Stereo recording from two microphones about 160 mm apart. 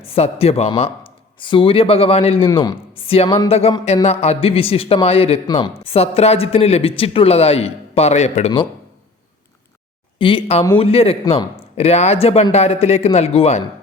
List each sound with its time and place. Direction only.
0.0 s a man's voice: 40° left (ahead or behind)
10.2 s a man's voice: 35° left (ahead or behind)